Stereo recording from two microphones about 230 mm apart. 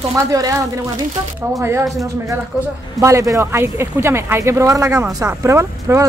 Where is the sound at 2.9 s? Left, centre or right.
Centre.